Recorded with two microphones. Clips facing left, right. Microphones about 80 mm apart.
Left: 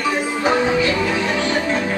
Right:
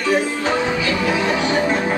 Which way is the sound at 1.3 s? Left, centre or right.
Centre.